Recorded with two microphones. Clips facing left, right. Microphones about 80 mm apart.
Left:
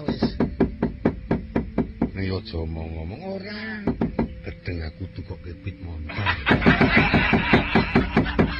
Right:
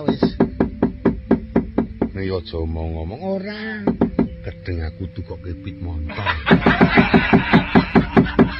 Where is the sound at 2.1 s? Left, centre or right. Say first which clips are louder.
Right 5 dB; right.